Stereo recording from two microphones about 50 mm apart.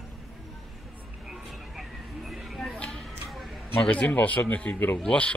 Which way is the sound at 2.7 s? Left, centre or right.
Centre.